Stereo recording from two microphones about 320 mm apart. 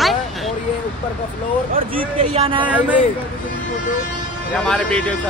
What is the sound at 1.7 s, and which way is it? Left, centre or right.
Speech, centre.